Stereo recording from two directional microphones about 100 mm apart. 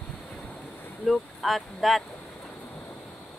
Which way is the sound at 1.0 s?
Centre (ahead or behind).